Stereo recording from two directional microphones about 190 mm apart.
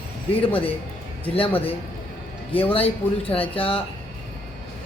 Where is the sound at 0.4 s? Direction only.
30° left (ahead or behind).